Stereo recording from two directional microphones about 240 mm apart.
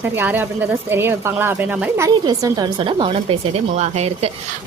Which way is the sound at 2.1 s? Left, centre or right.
Centre.